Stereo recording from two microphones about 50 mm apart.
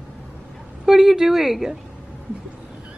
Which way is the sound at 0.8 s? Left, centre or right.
Centre.